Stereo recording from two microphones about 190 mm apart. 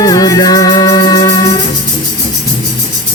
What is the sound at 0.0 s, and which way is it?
Music, 20° left (ahead or behind).